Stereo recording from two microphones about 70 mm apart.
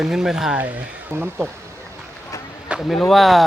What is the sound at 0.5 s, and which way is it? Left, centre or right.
Speech, right.